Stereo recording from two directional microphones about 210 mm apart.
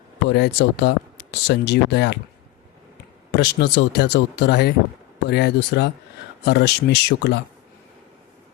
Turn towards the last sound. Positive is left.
turn(degrees=50)  # may be behind; listen again after turning